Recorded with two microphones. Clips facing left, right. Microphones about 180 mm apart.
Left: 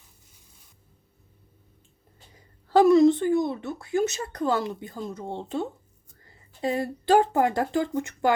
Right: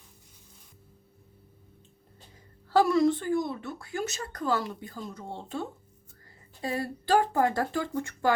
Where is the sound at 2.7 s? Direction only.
20° left (ahead or behind).